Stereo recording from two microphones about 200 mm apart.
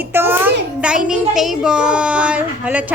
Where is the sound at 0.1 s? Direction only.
10° right (ahead or behind).